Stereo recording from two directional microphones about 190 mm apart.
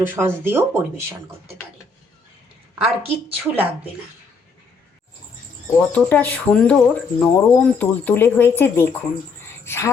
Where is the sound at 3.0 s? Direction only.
30° right (ahead or behind).